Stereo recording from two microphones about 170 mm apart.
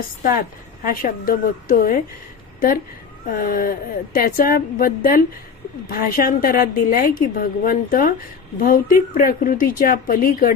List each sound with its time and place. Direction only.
0.9 s a woman's voice: 55° left (ahead or behind)
3.2 s a woman's voice: 60° left (ahead or behind)